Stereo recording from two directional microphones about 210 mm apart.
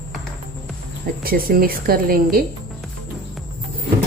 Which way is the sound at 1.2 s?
45° right (ahead or behind).